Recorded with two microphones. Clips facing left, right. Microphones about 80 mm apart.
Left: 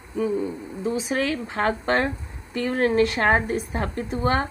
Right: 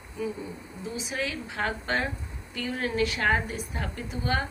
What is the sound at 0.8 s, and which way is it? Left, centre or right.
A woman's voice, left.